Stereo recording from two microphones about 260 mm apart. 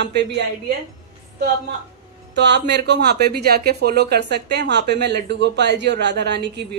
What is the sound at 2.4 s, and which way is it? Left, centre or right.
Speech, right.